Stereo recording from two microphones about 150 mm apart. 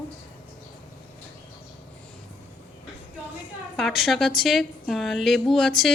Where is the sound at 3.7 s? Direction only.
Centre (ahead or behind).